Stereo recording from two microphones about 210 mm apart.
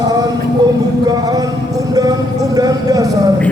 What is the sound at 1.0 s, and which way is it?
Music, 20° right (ahead or behind).